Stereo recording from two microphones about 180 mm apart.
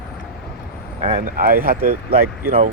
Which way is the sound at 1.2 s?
55° right (ahead or behind).